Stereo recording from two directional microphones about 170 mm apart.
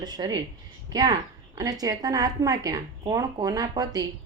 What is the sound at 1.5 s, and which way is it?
A woman's voice, 20° right (ahead or behind).